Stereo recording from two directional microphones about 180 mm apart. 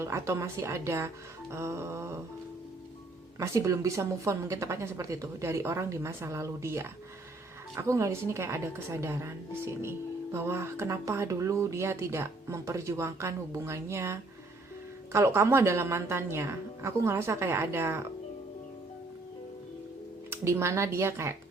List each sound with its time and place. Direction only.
0.0 s speech: 15° right (ahead or behind)
3.3 s speech: 15° right (ahead or behind)
20.3 s speech: 15° right (ahead or behind)